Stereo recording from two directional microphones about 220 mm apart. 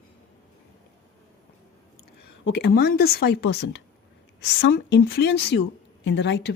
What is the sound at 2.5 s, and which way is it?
A woman's voice, 50° left (ahead or behind).